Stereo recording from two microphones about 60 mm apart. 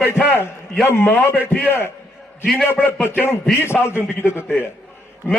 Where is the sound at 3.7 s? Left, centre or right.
Left.